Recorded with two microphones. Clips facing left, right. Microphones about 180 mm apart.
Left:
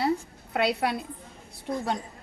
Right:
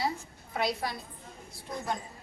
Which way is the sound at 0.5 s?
70° left (ahead or behind).